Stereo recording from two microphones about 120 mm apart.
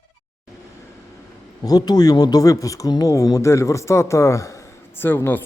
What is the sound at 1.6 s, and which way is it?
Speech, 35° left (ahead or behind).